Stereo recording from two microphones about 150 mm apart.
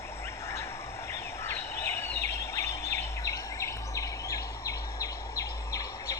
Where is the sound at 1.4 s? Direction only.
15° left (ahead or behind).